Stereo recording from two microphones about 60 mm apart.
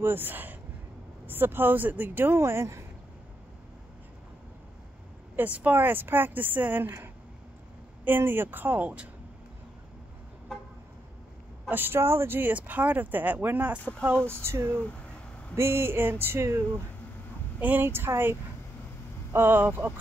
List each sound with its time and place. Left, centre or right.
0.0 s speech: right
5.3 s speech: right
11.7 s speech: right
14.2 s speech: right
14.6 s speech: centre
15.5 s speech: right
17.6 s speech: right
17.8 s speech: right